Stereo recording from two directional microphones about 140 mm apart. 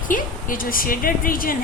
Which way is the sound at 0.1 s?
80° left.